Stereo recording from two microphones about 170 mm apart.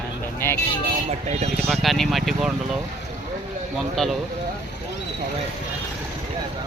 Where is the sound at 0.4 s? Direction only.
15° left (ahead or behind).